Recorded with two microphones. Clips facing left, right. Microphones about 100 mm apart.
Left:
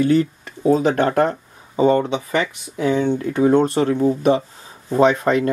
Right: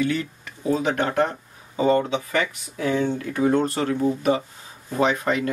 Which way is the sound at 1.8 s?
25° left (ahead or behind).